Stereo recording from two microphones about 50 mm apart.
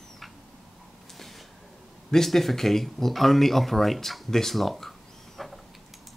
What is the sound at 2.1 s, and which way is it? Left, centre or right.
Speech, centre.